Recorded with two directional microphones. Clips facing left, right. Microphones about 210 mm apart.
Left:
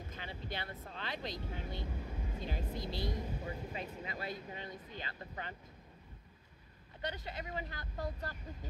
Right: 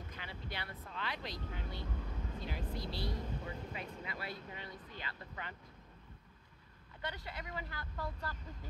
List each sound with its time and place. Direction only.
0.1 s a sound: 25° left (ahead or behind)
0.8 s speech: 30° left (ahead or behind)
1.9 s vehicle: 10° left (ahead or behind)
2.7 s speech: 20° left (ahead or behind)
3.4 s vehicle: 30° left (ahead or behind)
5.0 s speech: 35° left (ahead or behind)
7.0 s speech: 20° left (ahead or behind)